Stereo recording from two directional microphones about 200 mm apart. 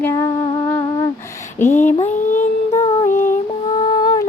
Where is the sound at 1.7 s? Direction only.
35° left (ahead or behind).